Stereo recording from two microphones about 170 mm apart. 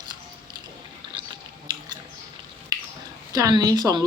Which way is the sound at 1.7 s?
25° right (ahead or behind).